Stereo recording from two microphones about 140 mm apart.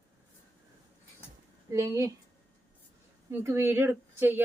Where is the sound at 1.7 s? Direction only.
25° right (ahead or behind).